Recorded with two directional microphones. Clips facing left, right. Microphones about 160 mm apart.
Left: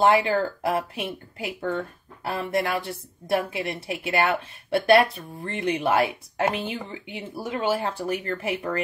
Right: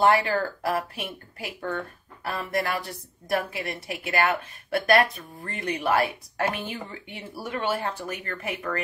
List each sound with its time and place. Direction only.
0.0 s speech: 20° left (ahead or behind)